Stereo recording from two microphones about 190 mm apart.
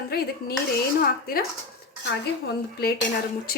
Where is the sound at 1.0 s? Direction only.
50° left (ahead or behind).